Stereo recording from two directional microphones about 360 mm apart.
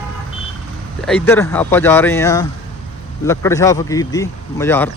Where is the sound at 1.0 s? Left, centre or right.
Centre.